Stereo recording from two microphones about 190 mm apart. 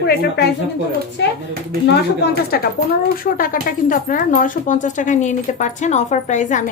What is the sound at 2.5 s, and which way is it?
A woman's voice, 55° left (ahead or behind).